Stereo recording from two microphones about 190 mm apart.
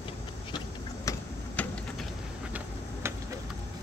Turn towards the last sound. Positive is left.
turn(degrees=-15)  # may be behind; listen again after turning